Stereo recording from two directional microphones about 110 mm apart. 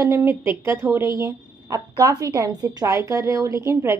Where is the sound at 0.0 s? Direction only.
25° right (ahead or behind).